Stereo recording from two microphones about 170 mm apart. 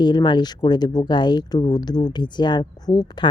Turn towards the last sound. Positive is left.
turn(degrees=25)  # may be behind; listen again after turning